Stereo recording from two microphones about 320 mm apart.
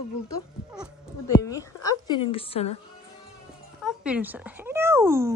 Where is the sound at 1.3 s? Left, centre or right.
Centre.